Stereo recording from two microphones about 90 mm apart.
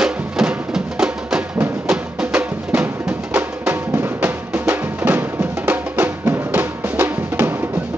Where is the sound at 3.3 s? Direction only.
25° right (ahead or behind).